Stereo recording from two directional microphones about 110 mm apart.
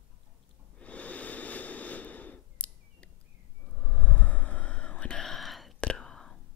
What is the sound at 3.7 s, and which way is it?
Whispering, 10° left (ahead or behind).